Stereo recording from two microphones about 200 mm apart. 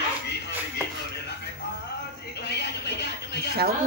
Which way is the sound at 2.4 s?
55° left (ahead or behind).